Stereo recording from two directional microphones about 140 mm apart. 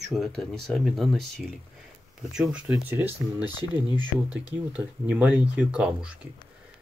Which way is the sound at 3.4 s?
30° left (ahead or behind).